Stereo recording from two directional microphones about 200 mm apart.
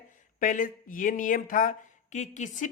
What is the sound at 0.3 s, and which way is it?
Speech, 40° left (ahead or behind).